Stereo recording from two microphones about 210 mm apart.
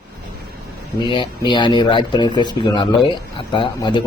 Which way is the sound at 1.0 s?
20° left (ahead or behind).